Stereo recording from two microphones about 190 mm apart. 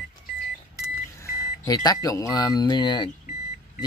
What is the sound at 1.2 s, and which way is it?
Speech, 15° left (ahead or behind).